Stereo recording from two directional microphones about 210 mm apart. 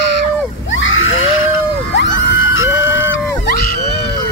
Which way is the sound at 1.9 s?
60° left (ahead or behind).